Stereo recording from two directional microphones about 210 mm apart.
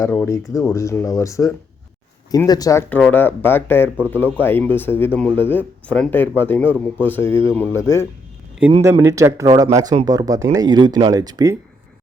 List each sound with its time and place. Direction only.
0.0 s speech: 10° left (ahead or behind)
8.8 s speech: 10° right (ahead or behind)